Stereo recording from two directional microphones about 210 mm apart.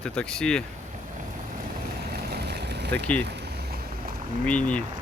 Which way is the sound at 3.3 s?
50° right (ahead or behind).